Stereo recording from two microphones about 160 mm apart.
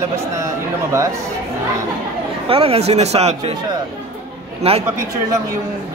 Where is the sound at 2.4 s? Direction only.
35° right (ahead or behind).